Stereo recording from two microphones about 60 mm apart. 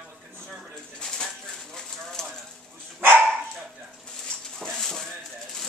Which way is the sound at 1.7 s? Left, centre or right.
Centre.